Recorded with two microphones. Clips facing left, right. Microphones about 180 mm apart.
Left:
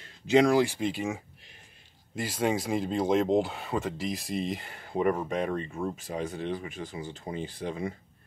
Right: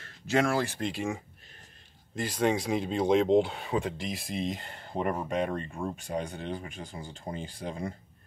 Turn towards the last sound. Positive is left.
turn(degrees=0)  # may be behind; listen again after turning